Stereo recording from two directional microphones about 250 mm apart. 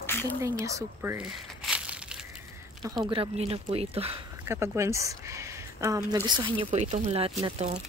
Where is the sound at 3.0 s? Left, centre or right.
Centre.